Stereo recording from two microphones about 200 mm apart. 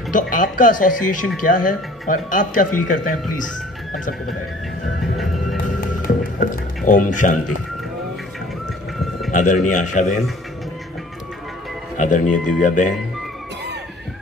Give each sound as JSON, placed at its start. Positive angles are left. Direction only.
{"t": 0.1, "sound": "speech", "side_deg": 40}
{"t": 5.1, "sound": "music", "side_deg": 0}
{"t": 6.0, "sound": "music", "side_deg": 45}
{"t": 9.3, "sound": "a man's voice", "side_deg": 40}
{"t": 12.0, "sound": "speech", "side_deg": 40}